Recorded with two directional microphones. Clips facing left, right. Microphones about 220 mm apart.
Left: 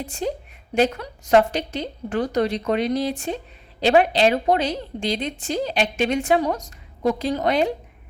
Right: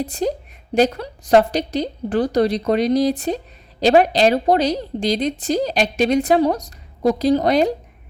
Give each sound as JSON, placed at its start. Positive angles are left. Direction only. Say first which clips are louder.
{"t": 0.0, "sound": "a woman's voice", "louder": "right 5 dB", "side_deg": -40}